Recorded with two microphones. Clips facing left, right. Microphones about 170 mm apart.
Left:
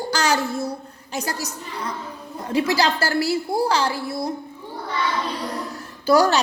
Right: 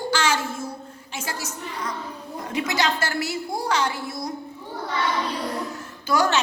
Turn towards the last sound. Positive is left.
turn(degrees=35)  # may be behind; listen again after turning